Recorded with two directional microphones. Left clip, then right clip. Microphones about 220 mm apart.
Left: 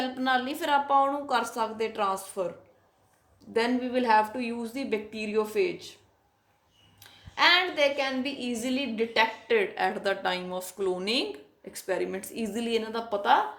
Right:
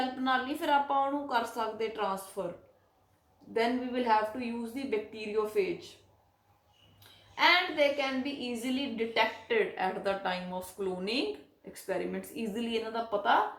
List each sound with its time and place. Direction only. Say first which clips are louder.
0.0 s a woman's voice: left 3 dB; 45° left (ahead or behind)
3.5 s a woman's voice: left 4 dB; 45° left (ahead or behind)
7.3 s a woman's voice: left 3 dB; 45° left (ahead or behind)